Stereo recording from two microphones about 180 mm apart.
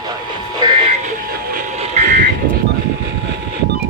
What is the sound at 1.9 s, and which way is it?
Vehicle, 45° right (ahead or behind).